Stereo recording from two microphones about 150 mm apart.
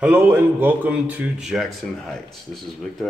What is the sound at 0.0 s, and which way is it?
A man's voice, 15° right (ahead or behind).